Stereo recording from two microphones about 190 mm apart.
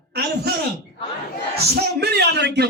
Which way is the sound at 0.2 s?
55° right (ahead or behind).